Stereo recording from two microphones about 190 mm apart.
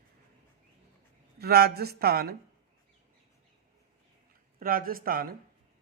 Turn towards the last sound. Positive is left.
turn(degrees=-50)  # may be behind; listen again after turning